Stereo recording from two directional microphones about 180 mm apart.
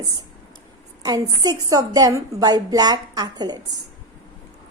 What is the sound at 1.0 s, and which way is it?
A woman's voice, 20° right (ahead or behind).